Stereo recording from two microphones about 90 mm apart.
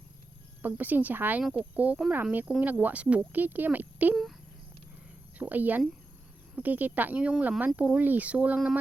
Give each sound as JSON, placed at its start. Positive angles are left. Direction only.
{"t": 0.6, "sound": "speech", "side_deg": -20}
{"t": 4.1, "sound": "speech", "side_deg": 0}
{"t": 5.4, "sound": "speech", "side_deg": -20}